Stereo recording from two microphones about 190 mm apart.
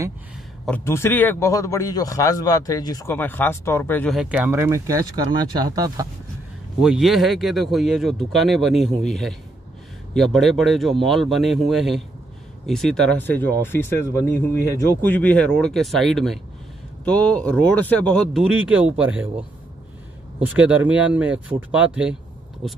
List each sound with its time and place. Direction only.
0.7 s a man's voice: 10° left (ahead or behind)
4.1 s speech: 5° right (ahead or behind); by 6.0 s 20° right (ahead or behind)
6.8 s a man's voice: centre (ahead or behind)
15.0 s speech: 10° left (ahead or behind); by 19.2 s 5° right (ahead or behind)
20.4 s speech: 10° right (ahead or behind)